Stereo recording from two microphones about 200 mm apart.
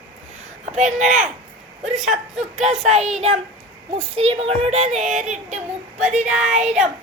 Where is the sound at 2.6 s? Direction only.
35° right (ahead or behind).